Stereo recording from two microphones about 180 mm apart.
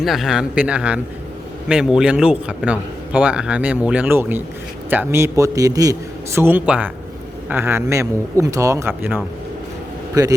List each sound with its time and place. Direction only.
0.0 s a man's voice: centre (ahead or behind)